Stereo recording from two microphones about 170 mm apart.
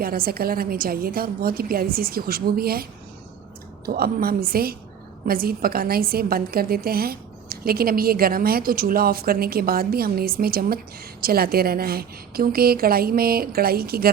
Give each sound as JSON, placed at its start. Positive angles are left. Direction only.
{"t": 0.0, "sound": "a woman's voice", "side_deg": -60}
{"t": 3.8, "sound": "a woman's voice", "side_deg": -60}